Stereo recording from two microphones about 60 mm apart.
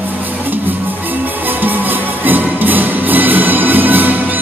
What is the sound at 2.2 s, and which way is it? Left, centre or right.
Music, right.